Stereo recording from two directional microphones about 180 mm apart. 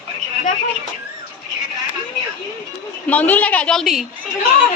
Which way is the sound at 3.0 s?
10° left (ahead or behind).